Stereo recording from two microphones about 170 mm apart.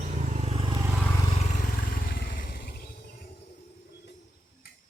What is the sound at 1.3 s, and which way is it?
Vehicle, 45° left (ahead or behind).